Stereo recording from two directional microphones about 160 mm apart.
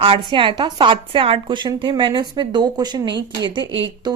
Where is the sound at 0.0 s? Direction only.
35° right (ahead or behind).